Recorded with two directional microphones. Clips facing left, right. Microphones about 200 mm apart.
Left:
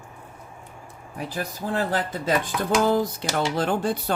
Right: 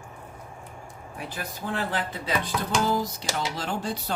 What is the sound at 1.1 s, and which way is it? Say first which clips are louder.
Speech: left 6 dB; 35° left (ahead or behind).